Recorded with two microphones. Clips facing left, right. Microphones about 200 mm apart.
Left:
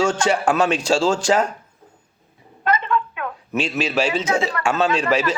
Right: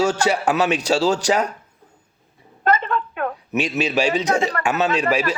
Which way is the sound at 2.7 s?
45° right (ahead or behind).